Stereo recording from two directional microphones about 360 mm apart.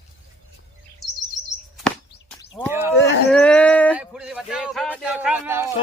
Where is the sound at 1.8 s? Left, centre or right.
Centre.